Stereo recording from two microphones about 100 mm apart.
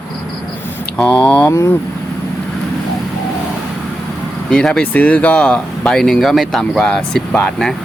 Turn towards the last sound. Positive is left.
turn(degrees=5)  # may be behind; listen again after turning